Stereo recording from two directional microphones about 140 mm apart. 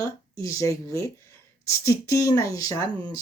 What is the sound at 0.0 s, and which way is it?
Speech, 20° left (ahead or behind).